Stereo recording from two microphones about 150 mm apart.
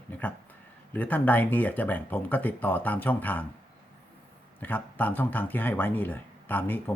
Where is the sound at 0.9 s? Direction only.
10° left (ahead or behind).